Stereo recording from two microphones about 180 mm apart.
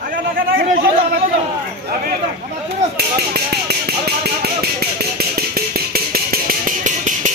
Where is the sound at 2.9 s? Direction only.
60° right (ahead or behind).